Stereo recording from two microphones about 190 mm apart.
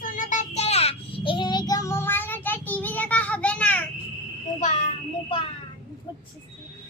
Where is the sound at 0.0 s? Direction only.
45° left (ahead or behind); by 3.8 s 5° left (ahead or behind).